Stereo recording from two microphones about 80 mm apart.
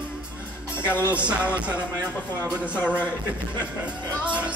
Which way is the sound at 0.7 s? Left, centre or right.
Left.